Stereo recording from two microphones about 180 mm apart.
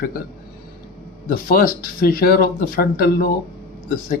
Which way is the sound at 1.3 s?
55° left (ahead or behind).